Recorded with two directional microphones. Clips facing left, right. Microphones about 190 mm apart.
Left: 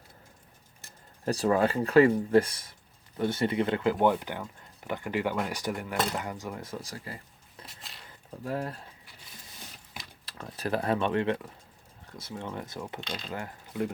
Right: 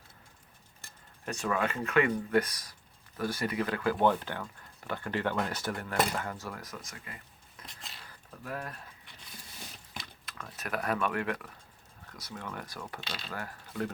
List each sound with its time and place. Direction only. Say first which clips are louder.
1.2 s speech: left 7 dB; 35° left (ahead or behind)
7.7 s a sound: even; centre (ahead or behind)
8.0 s speech: left 7 dB; 25° left (ahead or behind)
10.2 s speech: left 9 dB; 30° left (ahead or behind)
13.0 s speech: left 4 dB; 5° right (ahead or behind)
13.3 s speech: left 2 dB; 20° left (ahead or behind)